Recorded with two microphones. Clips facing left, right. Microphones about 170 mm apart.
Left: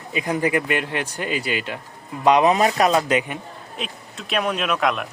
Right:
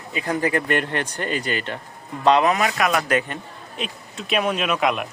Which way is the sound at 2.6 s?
35° left (ahead or behind).